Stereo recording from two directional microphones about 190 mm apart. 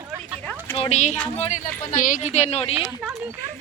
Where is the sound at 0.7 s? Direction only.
35° left (ahead or behind).